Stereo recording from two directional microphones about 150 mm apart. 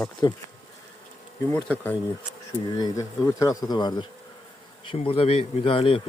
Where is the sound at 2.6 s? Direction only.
25° left (ahead or behind).